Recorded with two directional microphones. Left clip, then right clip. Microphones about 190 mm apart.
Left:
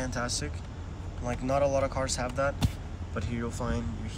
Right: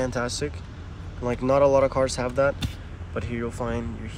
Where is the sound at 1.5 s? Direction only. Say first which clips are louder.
Right 8 dB; centre (ahead or behind).